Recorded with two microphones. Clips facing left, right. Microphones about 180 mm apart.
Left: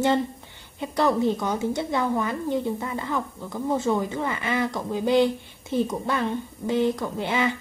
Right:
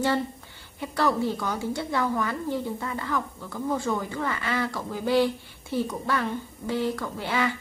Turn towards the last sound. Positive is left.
turn(degrees=20)  # may be behind; listen again after turning